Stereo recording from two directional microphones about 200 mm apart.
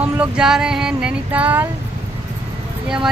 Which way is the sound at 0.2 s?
5° right (ahead or behind).